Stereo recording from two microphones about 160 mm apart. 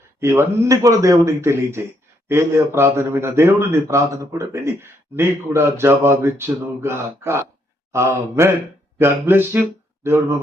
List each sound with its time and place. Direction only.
0.2 s a man's voice: 15° right (ahead or behind)